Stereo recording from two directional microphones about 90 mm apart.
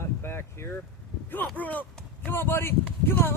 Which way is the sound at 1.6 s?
15° left (ahead or behind).